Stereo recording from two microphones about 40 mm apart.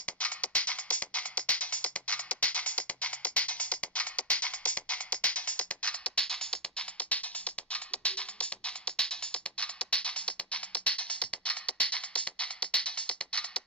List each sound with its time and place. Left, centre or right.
0.2 s music: left
6.2 s music: centre
7.0 s music: left